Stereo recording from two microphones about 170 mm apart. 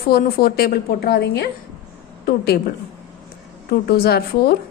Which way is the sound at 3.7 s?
65° left (ahead or behind).